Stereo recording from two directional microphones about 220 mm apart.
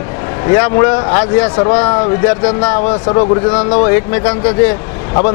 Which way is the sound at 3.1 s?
25° left (ahead or behind).